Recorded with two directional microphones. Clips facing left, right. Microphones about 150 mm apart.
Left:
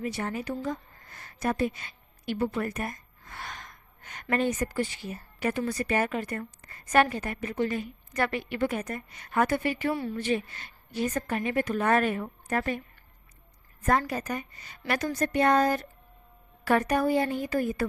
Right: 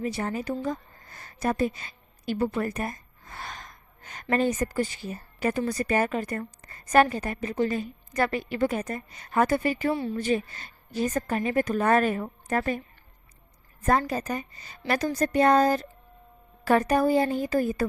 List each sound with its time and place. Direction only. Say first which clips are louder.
0.0 s a woman's voice: right 2 dB; 35° right (ahead or behind)
9.9 s a woman's voice: right 2 dB; 25° right (ahead or behind)
10.2 s a woman's voice: right 2 dB; 40° right (ahead or behind)
14.1 s a woman's voice: right 2 dB; 30° right (ahead or behind)